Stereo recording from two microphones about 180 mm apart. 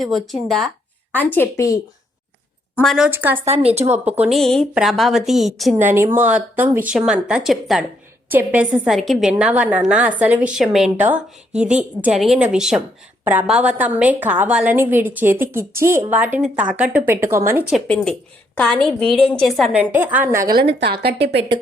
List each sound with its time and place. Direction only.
0.0 s a woman's voice: centre (ahead or behind); by 1.8 s 15° left (ahead or behind)
2.8 s a woman's voice: centre (ahead or behind)
3.3 s a woman's voice: 35° right (ahead or behind)
4.0 s a woman's voice: 10° right (ahead or behind)
4.4 s a woman's voice: 5° left (ahead or behind)
5.8 s a woman's voice: 15° right (ahead or behind)
17.7 s a woman's voice: 5° left (ahead or behind); by 20.5 s 15° right (ahead or behind)
20.5 s a woman's voice: 65° right (ahead or behind)